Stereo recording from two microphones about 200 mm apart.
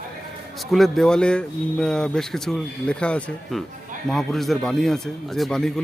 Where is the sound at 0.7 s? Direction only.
Centre (ahead or behind).